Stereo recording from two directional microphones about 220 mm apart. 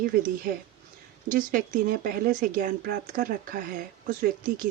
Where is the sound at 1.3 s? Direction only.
40° right (ahead or behind).